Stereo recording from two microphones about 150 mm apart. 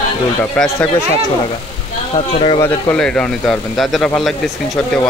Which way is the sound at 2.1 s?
40° left (ahead or behind).